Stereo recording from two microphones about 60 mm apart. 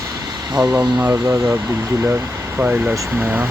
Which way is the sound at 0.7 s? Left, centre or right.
Right.